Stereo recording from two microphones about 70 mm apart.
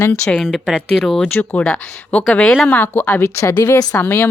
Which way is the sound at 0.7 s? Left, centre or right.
Centre.